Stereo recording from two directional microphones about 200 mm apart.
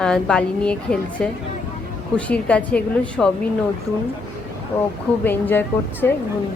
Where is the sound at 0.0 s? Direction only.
5° left (ahead or behind).